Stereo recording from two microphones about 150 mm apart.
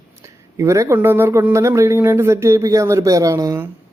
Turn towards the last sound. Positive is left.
turn(degrees=-20)  # may be behind; listen again after turning